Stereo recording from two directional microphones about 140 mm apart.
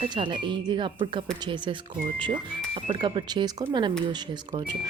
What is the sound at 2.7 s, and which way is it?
Speech, 35° right (ahead or behind).